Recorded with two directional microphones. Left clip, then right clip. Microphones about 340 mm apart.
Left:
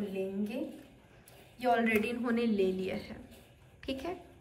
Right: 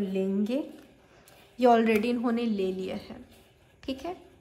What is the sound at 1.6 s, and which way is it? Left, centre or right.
A woman's voice, centre.